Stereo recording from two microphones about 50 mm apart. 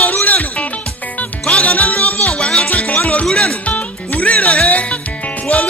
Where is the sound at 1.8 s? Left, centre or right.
Left.